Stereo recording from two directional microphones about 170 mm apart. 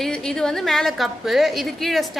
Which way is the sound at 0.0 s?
5° left (ahead or behind).